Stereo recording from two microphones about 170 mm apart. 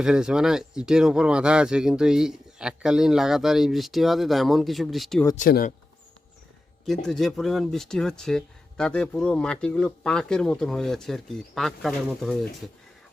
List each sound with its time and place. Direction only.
0.0 s speech: 5° right (ahead or behind)
5.4 s speech: 55° left (ahead or behind)
6.8 s speech: centre (ahead or behind)